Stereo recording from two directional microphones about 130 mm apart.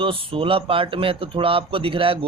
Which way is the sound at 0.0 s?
45° right (ahead or behind).